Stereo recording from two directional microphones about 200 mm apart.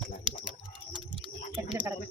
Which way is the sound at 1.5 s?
25° right (ahead or behind).